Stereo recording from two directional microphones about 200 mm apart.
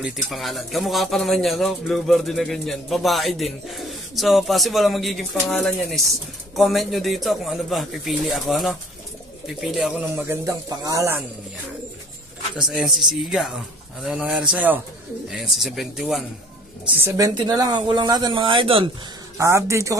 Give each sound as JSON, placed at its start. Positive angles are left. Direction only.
{"t": 0.0, "sound": "speech", "side_deg": 0}
{"t": 12.5, "sound": "speech", "side_deg": 0}
{"t": 17.0, "sound": "speech", "side_deg": -15}
{"t": 19.3, "sound": "speech", "side_deg": -15}